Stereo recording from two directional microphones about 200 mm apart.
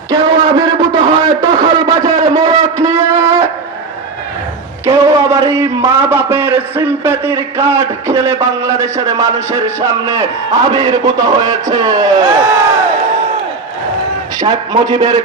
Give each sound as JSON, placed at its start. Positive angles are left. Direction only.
{"t": 0.1, "sound": "a sound", "side_deg": -20}
{"t": 4.9, "sound": "a man's voice", "side_deg": -15}
{"t": 14.3, "sound": "a man's voice", "side_deg": -20}